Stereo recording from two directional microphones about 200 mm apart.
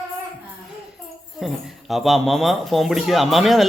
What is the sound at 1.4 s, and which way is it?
Speech, centre (ahead or behind).